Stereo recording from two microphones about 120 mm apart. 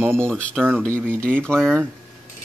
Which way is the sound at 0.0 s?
20° right (ahead or behind).